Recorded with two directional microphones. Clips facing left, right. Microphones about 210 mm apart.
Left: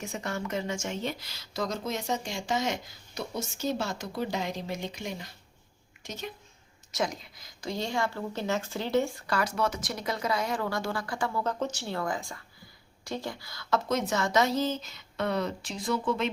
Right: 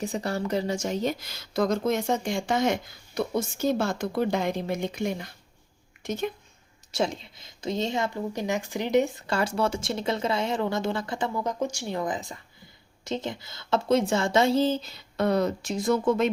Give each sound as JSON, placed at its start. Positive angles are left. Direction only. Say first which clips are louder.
{"t": 0.0, "sound": "a woman's voice", "louder": "right 6 dB", "side_deg": -35}
{"t": 6.9, "sound": "a woman's voice", "louder": "right 4 dB", "side_deg": -25}